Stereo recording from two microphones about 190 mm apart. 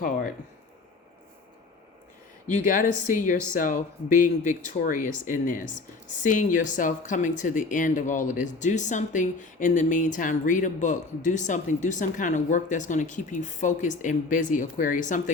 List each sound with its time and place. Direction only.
2.5 s speech: 40° left (ahead or behind)